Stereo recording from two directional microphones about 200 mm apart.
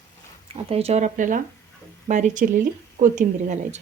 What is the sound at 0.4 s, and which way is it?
Speech, 30° right (ahead or behind).